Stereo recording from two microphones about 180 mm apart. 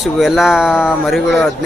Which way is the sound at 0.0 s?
Centre (ahead or behind).